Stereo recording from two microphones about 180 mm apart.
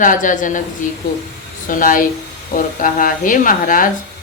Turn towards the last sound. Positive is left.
turn(degrees=50)  # may be behind; listen again after turning